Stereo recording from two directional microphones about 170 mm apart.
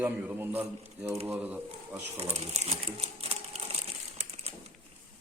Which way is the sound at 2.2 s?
40° right (ahead or behind).